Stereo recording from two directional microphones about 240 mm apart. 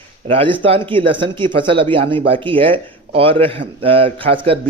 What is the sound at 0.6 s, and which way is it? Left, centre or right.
Speech, right.